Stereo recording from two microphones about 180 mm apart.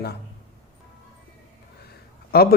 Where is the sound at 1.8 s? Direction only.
60° left (ahead or behind).